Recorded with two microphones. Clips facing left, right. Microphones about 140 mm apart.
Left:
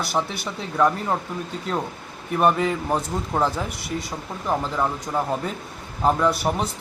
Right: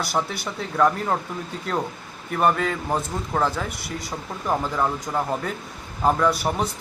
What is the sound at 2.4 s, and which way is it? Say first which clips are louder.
Speech: left 1 dB; 15° left (ahead or behind).